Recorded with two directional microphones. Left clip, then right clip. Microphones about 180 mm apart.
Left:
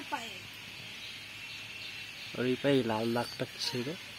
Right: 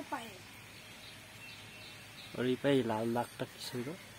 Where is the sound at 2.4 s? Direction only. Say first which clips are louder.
Left 2 dB; 15° left (ahead or behind).